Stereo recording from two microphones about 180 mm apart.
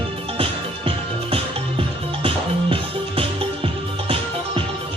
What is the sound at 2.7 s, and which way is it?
Music, 30° right (ahead or behind).